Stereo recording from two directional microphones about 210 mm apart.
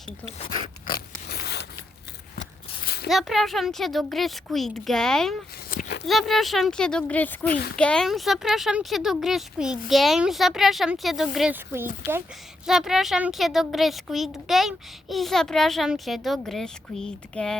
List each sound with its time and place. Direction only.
1.3 s zipper: 50° left (ahead or behind)
2.4 s walk: 50° left (ahead or behind)
3.1 s a woman's voice: centre (ahead or behind)
5.7 s a sound: 55° left (ahead or behind)
6.1 s a woman's voice: centre (ahead or behind)
7.4 s a child's voice: 45° left (ahead or behind)
7.8 s a woman's voice: 5° left (ahead or behind)